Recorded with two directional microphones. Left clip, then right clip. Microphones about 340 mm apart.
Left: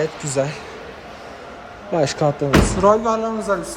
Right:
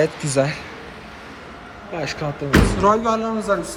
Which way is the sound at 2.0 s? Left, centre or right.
Centre.